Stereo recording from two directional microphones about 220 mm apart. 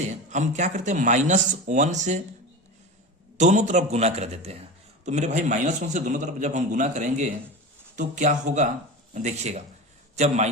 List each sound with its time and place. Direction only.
0.1 s a man's voice: 35° right (ahead or behind)
3.3 s a man's voice: 30° right (ahead or behind)